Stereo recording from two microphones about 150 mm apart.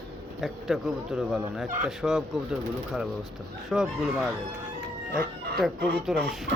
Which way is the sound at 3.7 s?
5° right (ahead or behind).